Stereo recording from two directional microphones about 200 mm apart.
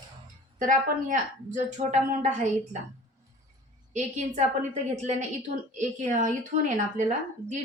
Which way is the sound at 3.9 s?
35° right (ahead or behind).